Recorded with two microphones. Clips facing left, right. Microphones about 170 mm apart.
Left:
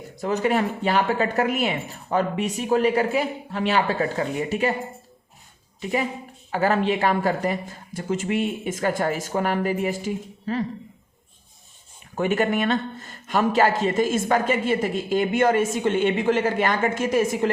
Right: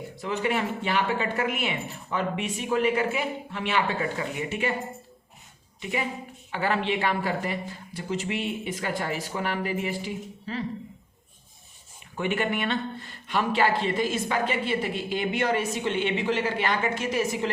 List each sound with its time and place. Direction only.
0.2 s speech: 40° left (ahead or behind)
5.8 s speech: 40° left (ahead or behind)
12.1 s speech: 40° left (ahead or behind)